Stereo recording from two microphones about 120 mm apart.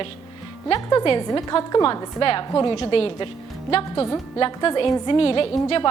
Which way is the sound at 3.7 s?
50° left (ahead or behind).